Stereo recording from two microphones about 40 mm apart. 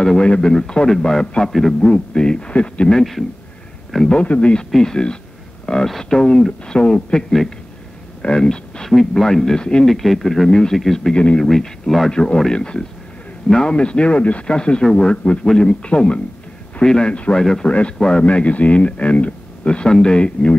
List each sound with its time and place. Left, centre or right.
0.0 s speech: centre
1.2 s speech: left
1.5 s a man's voice: centre
1.8 s speech: left
2.9 s speech: centre
4.2 s speech: left
4.6 s speech: centre
8.4 s speech: centre
9.6 s speech: left
9.8 s speech: centre
12.1 s speech: left
16.8 s speech: centre
17.6 s speech: left
18.2 s a man's voice: left